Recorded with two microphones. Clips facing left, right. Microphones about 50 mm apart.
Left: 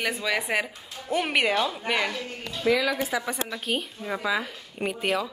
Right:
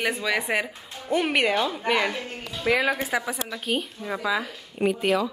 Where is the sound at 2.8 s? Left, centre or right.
Right.